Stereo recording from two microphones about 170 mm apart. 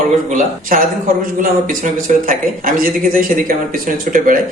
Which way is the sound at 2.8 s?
55° right (ahead or behind).